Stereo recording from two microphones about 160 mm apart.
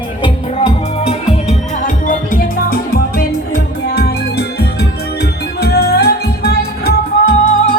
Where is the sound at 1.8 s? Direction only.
55° left (ahead or behind); by 7.7 s 75° left (ahead or behind).